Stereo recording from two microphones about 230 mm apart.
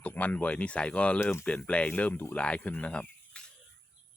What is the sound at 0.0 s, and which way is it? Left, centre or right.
Speech, centre.